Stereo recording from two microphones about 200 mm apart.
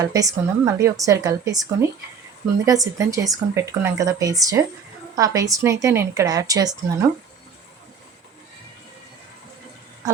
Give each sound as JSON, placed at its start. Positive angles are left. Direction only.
{"t": 0.0, "sound": "speech", "side_deg": -15}